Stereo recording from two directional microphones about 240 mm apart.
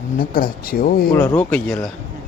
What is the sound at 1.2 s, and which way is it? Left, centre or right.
Speech, centre.